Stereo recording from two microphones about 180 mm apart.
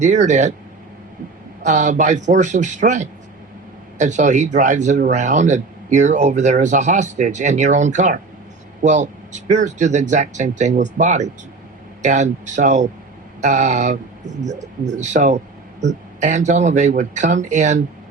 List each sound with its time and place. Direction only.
0.0 s speech: 40° right (ahead or behind)
1.6 s speech: 45° right (ahead or behind)